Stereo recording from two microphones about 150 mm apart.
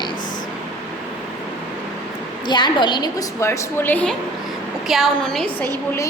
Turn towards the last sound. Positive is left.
turn(degrees=5)  # may be behind; listen again after turning